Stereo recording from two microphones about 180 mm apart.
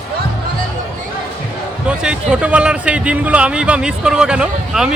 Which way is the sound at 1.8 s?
5° right (ahead or behind).